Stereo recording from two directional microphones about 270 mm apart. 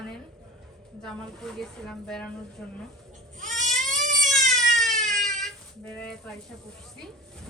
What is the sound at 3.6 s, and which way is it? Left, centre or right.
Goat, right.